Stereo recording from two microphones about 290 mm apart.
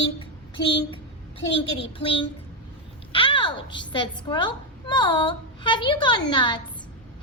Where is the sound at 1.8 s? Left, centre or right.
Centre.